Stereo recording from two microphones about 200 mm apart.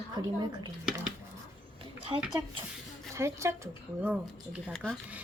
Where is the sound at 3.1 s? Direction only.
15° right (ahead or behind).